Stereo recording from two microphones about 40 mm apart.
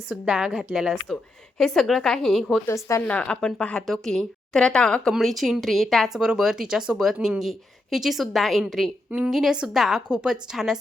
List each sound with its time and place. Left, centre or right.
0.1 s speech: centre
1.0 s a woman's voice: centre
3.0 s speech: left
3.4 s speech: left
3.8 s a woman's voice: centre
5.2 s a woman's voice: centre
9.0 s a woman's voice: right
9.3 s speech: centre
10.1 s speech: centre